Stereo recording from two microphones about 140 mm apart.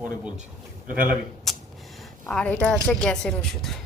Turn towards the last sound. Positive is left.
turn(degrees=5)  # may be behind; listen again after turning